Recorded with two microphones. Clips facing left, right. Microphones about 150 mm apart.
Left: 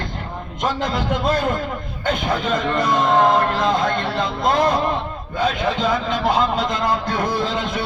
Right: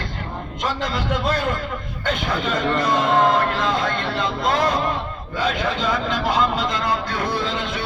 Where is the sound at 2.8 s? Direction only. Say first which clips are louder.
Left 2 dB; 50° left (ahead or behind).